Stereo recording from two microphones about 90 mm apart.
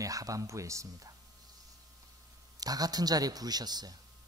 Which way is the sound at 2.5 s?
45° right (ahead or behind).